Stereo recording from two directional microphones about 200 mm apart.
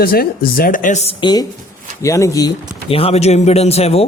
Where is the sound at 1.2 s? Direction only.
20° left (ahead or behind).